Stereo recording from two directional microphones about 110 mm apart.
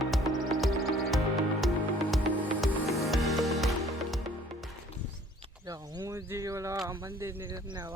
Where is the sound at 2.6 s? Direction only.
Centre (ahead or behind).